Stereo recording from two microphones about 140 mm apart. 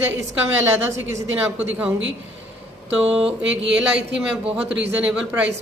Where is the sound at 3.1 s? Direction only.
5° right (ahead or behind).